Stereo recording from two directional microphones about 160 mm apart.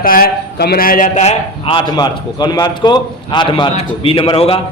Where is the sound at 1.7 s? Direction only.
25° left (ahead or behind).